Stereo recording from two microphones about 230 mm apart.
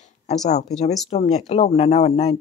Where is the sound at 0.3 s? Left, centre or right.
Left.